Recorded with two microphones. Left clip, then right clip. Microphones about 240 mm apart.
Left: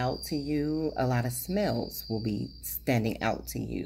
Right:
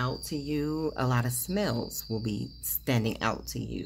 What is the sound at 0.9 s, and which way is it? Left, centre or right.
Speech, centre.